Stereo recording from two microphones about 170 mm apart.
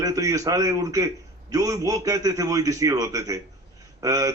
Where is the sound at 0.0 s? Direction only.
20° right (ahead or behind).